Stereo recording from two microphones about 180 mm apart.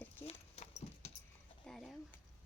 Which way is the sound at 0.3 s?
35° left (ahead or behind).